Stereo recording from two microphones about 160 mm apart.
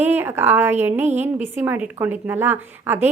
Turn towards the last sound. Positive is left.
turn(degrees=-15)  # may be behind; listen again after turning